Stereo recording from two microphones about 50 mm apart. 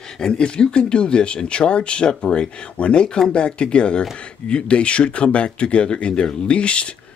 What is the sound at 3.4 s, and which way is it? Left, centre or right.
Speech, left.